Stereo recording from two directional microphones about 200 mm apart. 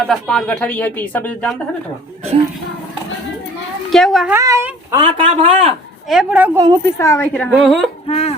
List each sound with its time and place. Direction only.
0.1 s speech: 5° left (ahead or behind)
3.8 s a woman's voice: centre (ahead or behind)
4.4 s speech: 15° right (ahead or behind)
6.1 s a woman's voice: 5° right (ahead or behind)
7.0 s speech: 15° left (ahead or behind)
7.3 s a woman's voice: 5° left (ahead or behind)
8.0 s speech: 30° left (ahead or behind)